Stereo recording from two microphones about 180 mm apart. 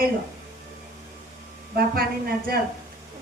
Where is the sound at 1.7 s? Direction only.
55° right (ahead or behind).